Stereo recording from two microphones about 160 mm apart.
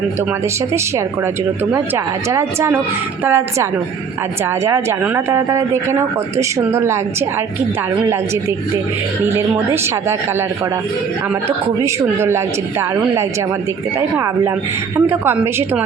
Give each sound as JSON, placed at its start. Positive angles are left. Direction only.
{"t": 2.3, "sound": "speech", "side_deg": -15}
{"t": 14.9, "sound": "speech", "side_deg": -15}